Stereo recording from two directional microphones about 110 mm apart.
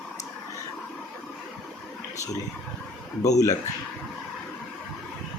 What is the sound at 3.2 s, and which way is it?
Speech, 30° left (ahead or behind).